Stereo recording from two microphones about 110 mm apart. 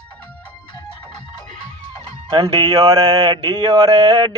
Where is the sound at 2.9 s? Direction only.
35° right (ahead or behind).